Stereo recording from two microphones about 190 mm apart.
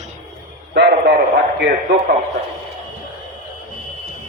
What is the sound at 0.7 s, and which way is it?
A man's voice, 65° right (ahead or behind).